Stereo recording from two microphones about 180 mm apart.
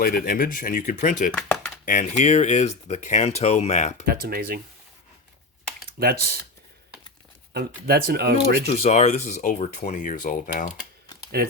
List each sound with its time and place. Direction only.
0.0 s speech: 55° left (ahead or behind)
1.3 s a sound: 5° left (ahead or behind)
1.8 s speech: 45° left (ahead or behind)
4.0 s speech: 60° right (ahead or behind)
6.0 s speech: 60° right (ahead or behind)
7.5 s speech: 60° right (ahead or behind)
8.6 s speech: 35° left (ahead or behind)
11.4 s speech: 55° right (ahead or behind)